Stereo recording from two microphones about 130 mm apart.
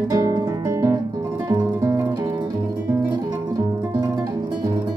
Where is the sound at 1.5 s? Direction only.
35° right (ahead or behind).